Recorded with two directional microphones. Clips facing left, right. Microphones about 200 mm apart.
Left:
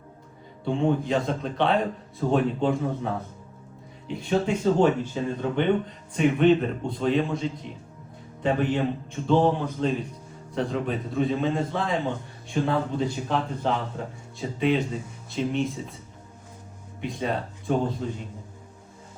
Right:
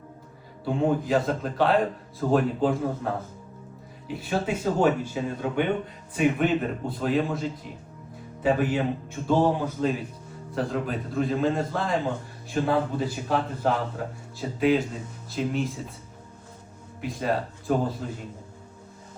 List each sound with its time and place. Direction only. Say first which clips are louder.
0.6 s speech: even; 5° right (ahead or behind)
4.1 s a man's voice: left 3 dB; 5° right (ahead or behind)
17.0 s speech: right 1 dB; centre (ahead or behind)